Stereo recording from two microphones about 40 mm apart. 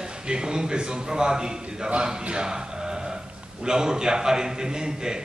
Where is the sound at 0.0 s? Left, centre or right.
Centre.